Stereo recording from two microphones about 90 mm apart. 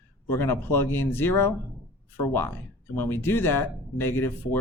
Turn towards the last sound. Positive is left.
turn(degrees=25)  # may be behind; listen again after turning